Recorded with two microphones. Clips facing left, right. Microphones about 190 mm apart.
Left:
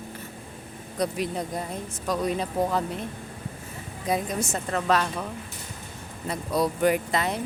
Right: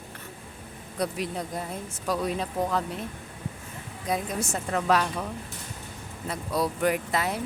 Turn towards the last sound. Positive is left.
turn(degrees=-5)  # may be behind; listen again after turning